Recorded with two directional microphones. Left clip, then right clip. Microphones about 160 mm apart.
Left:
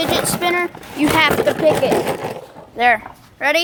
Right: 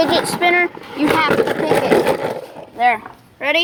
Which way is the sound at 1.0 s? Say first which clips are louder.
Left 1 dB; 60° left (ahead or behind).